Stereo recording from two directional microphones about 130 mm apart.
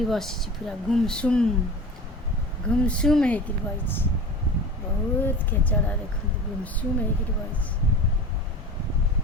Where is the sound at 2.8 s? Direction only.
10° left (ahead or behind).